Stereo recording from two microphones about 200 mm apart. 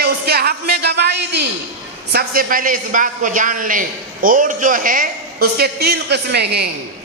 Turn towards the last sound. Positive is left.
turn(degrees=-55)  # may be behind; listen again after turning